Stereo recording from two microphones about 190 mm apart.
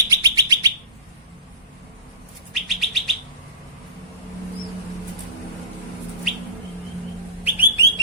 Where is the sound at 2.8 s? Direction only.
Centre (ahead or behind).